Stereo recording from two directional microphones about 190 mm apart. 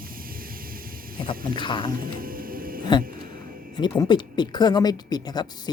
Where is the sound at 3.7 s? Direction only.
25° left (ahead or behind).